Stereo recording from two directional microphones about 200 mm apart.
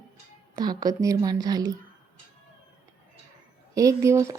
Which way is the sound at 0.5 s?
20° right (ahead or behind).